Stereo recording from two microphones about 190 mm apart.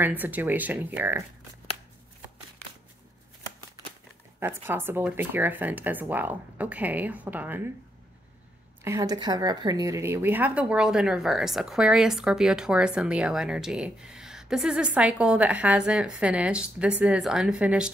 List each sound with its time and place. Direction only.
0.0 s speech: 10° right (ahead or behind)
4.4 s speech: 10° right (ahead or behind)
8.8 s a woman's voice: 15° right (ahead or behind)